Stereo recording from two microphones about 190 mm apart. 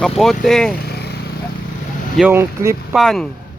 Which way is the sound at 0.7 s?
55° left (ahead or behind).